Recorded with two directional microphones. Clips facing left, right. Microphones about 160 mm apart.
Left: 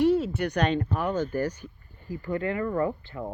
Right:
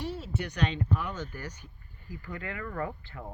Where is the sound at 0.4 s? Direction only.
60° left (ahead or behind).